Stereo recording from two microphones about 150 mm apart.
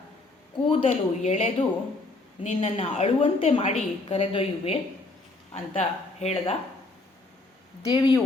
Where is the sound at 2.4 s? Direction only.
40° left (ahead or behind).